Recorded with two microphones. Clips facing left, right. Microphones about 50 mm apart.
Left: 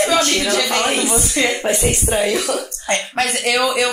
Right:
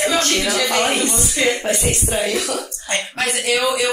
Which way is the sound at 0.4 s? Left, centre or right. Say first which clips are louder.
Even; centre.